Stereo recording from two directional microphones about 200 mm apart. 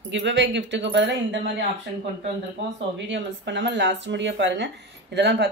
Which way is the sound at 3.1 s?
65° right (ahead or behind).